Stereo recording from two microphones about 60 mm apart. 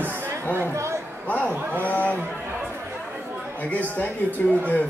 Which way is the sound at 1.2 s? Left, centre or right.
Left.